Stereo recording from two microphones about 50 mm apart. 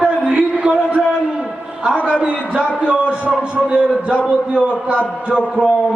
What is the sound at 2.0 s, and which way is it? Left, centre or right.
A man's voice, right.